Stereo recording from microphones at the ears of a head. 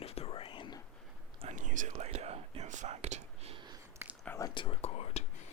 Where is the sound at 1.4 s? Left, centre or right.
Right.